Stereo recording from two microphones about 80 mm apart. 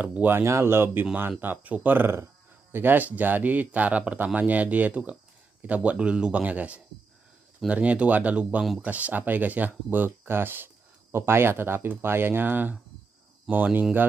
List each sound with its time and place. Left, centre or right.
0.0 s speech: right
0.4 s speech: right